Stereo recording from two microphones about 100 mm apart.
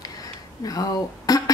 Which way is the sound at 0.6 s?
35° left (ahead or behind).